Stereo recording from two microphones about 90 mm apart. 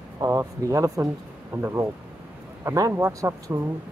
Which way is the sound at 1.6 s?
30° right (ahead or behind).